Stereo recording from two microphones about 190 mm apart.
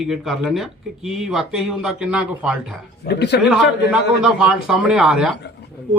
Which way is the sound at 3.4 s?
5° right (ahead or behind).